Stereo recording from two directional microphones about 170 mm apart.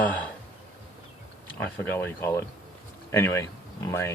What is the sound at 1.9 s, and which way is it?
Speech, 15° left (ahead or behind).